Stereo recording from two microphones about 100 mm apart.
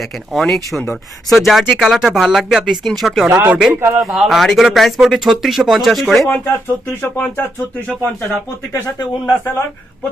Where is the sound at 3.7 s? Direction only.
25° right (ahead or behind).